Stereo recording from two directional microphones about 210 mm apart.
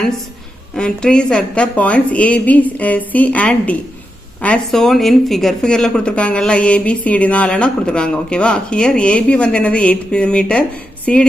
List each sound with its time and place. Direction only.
0.8 s a woman's voice: 5° left (ahead or behind)